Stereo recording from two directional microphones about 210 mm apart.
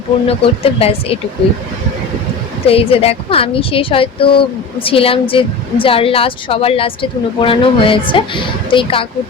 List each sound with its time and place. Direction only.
0.3 s a woman's voice: 30° left (ahead or behind)
2.6 s a woman's voice: 25° left (ahead or behind)